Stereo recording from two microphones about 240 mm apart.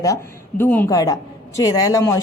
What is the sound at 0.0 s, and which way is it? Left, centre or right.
A woman's voice, centre.